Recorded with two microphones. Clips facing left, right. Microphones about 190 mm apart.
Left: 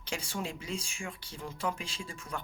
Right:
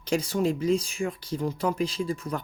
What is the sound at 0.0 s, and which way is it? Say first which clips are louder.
Speech: right 12 dB; 40° right (ahead or behind).